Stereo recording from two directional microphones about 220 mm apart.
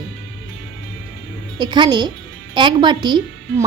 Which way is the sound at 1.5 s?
20° right (ahead or behind).